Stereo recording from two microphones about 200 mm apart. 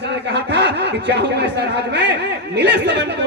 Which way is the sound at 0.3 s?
60° right (ahead or behind).